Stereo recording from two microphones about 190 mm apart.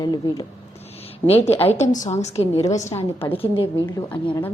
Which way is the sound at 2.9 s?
10° left (ahead or behind).